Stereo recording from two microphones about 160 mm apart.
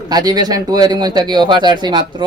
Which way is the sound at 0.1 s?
25° right (ahead or behind).